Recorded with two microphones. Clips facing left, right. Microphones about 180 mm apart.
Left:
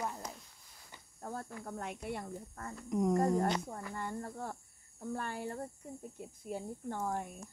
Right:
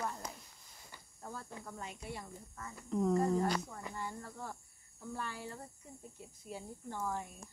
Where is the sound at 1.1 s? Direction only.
45° left (ahead or behind).